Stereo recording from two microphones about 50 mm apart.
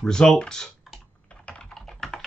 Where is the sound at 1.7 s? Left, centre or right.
Centre.